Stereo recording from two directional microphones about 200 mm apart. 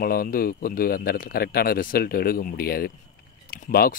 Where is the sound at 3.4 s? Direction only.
45° left (ahead or behind).